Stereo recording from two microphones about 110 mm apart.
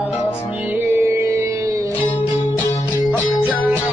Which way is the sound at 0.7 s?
20° right (ahead or behind).